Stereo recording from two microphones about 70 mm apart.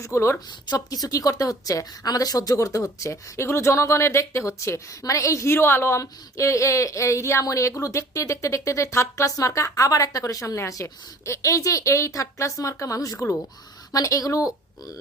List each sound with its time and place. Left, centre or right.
0.0 s speech: left
0.3 s a woman's voice: left
2.6 s speech: left